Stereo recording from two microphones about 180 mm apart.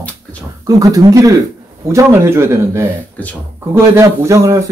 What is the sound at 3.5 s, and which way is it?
Speech, 15° right (ahead or behind).